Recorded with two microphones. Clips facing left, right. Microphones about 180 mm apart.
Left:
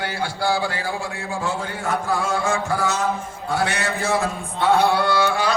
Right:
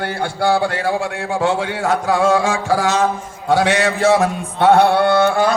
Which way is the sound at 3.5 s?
90° right.